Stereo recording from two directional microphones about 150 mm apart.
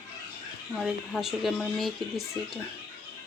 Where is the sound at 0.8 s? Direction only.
Centre (ahead or behind).